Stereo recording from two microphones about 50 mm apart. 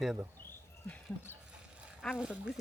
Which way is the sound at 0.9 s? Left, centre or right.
Left.